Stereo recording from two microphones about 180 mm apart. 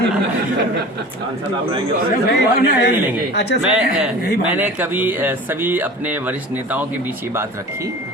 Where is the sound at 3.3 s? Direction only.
70° left (ahead or behind).